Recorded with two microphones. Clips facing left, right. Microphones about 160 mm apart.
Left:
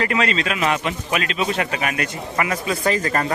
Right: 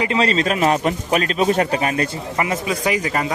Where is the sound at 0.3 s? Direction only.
40° right (ahead or behind).